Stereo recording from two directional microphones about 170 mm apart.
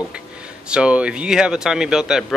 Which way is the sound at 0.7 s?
5° right (ahead or behind).